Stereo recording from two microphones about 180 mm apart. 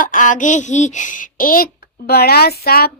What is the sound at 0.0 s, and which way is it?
A woman's voice, 45° left (ahead or behind).